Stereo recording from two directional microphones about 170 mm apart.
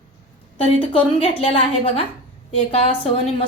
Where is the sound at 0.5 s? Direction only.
35° left (ahead or behind).